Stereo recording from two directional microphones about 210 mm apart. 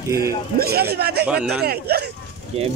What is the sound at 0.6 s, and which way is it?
Speech, 50° right (ahead or behind).